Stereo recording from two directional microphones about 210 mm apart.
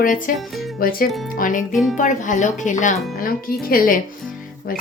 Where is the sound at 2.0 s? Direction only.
35° left (ahead or behind).